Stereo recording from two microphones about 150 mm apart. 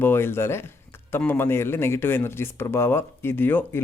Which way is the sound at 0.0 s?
15° left (ahead or behind).